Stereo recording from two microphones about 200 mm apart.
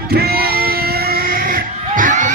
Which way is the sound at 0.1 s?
50° right (ahead or behind).